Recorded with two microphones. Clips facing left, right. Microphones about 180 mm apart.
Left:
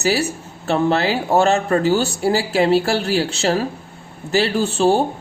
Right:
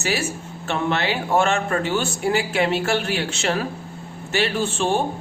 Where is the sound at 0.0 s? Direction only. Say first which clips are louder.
Left 5 dB; 35° left (ahead or behind).